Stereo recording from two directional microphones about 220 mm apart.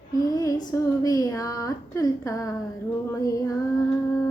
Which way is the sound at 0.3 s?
15° left (ahead or behind).